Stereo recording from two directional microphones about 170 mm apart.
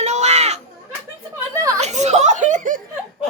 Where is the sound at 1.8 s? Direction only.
40° right (ahead or behind).